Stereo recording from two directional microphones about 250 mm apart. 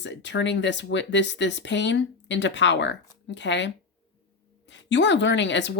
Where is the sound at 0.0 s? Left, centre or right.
Left.